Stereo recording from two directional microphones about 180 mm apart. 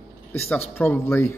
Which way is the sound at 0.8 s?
10° left (ahead or behind).